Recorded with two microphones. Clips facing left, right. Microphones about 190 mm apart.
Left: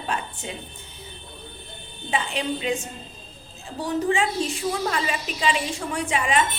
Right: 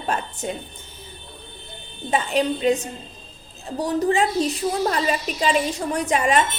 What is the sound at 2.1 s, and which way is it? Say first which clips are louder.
A woman's voice: right 5 dB; 40° right (ahead or behind).